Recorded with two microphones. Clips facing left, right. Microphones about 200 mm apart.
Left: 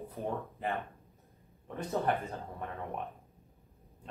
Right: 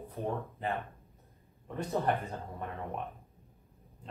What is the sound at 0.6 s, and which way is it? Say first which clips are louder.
Speech: even; centre (ahead or behind).